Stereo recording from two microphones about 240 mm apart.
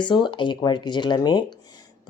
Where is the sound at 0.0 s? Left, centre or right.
Centre.